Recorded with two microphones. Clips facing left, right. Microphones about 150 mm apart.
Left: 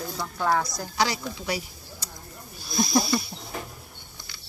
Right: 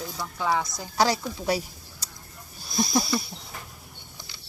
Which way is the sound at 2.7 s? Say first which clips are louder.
Left 2 dB; 10° left (ahead or behind).